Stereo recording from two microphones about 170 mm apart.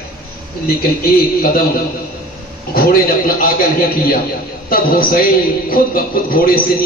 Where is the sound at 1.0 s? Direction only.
60° left (ahead or behind).